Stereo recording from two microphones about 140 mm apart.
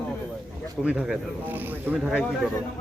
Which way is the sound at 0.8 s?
5° right (ahead or behind).